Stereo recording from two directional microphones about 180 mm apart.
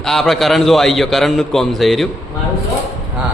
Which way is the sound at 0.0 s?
Centre (ahead or behind).